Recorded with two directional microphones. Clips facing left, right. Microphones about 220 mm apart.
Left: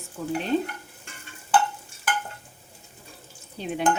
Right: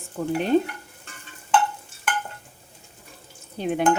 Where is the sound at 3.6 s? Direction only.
55° right (ahead or behind).